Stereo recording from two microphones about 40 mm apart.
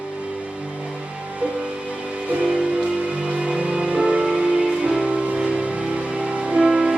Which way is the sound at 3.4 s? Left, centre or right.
Right.